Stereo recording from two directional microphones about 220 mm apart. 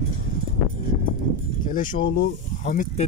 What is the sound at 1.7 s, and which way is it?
Speech, 35° left (ahead or behind).